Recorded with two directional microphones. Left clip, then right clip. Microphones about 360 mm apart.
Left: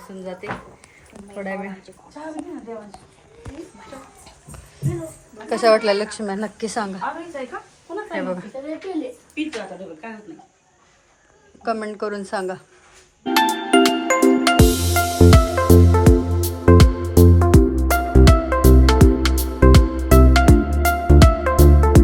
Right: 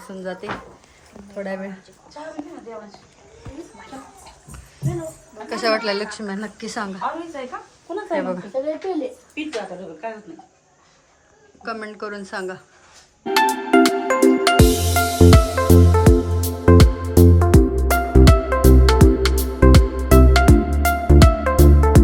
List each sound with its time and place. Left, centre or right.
0.4 s speech: centre
5.5 s a woman's voice: centre
8.1 s a woman's voice: centre
9.4 s a woman's voice: right
11.6 s a woman's voice: centre
13.3 s music: centre